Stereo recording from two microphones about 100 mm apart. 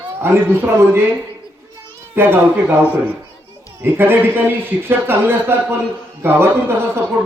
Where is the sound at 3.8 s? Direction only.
20° right (ahead or behind).